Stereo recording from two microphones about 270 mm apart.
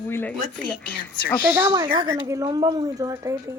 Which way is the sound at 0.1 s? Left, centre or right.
Centre.